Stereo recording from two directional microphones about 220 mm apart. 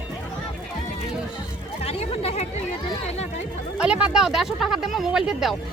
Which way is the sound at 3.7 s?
5° right (ahead or behind).